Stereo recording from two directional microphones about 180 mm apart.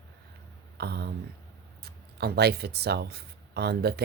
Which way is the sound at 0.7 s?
65° right (ahead or behind).